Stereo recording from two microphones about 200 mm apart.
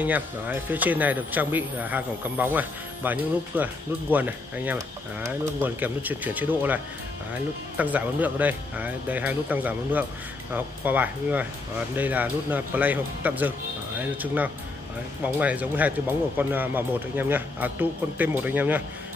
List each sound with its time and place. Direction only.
0.0 s speech: 10° right (ahead or behind)